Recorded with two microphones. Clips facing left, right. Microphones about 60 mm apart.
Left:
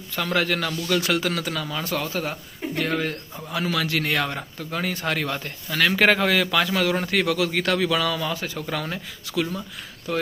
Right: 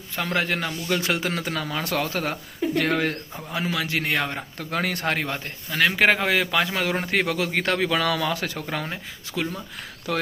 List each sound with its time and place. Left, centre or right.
0.2 s a man's voice: right
1.8 s speech: right
3.5 s a man's voice: centre
4.5 s speech: right
5.0 s a man's voice: right
8.5 s speech: right
10.1 s speech: right